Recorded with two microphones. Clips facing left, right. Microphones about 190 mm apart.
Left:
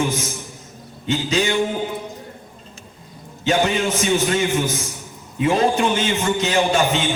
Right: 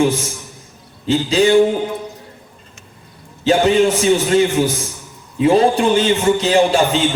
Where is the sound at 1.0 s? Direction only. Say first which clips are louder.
Right 6 dB; 35° right (ahead or behind).